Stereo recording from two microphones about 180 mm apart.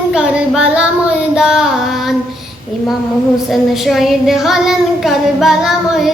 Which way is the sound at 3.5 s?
Centre (ahead or behind).